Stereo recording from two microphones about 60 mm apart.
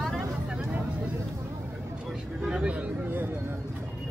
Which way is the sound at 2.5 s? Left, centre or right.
Centre.